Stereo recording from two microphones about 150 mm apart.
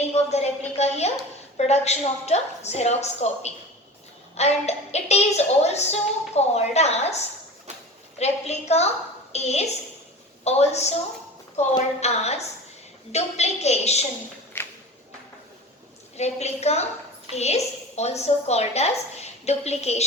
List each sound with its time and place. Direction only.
0.0 s a woman's voice: 45° left (ahead or behind)
16.1 s a woman's voice: 45° left (ahead or behind)